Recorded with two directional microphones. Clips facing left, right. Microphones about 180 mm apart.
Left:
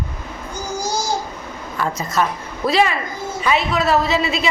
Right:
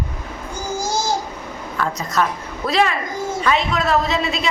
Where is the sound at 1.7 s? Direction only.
5° left (ahead or behind).